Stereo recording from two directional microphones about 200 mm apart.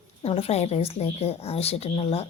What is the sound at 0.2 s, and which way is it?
A woman's voice, 30° left (ahead or behind).